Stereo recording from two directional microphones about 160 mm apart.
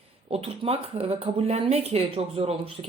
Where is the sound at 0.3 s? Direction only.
35° right (ahead or behind).